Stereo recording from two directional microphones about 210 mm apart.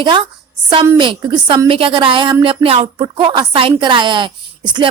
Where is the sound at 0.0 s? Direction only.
20° right (ahead or behind).